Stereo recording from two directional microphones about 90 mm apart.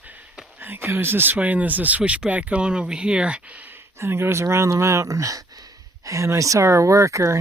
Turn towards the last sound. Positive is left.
turn(degrees=-35)  # may be behind; listen again after turning